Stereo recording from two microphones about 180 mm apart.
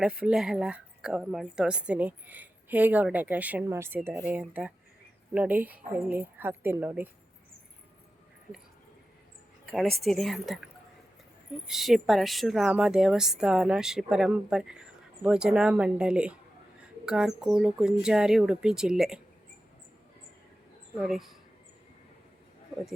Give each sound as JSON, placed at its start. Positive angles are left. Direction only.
{"t": 0.0, "sound": "a woman's voice", "side_deg": -5}
{"t": 10.0, "sound": "speech", "side_deg": 0}
{"t": 11.7, "sound": "speech", "side_deg": 0}
{"t": 21.0, "sound": "speech", "side_deg": 0}